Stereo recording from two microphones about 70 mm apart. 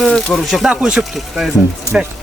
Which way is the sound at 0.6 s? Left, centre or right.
Centre.